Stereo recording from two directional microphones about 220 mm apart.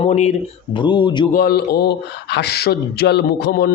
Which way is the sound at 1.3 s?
40° left (ahead or behind).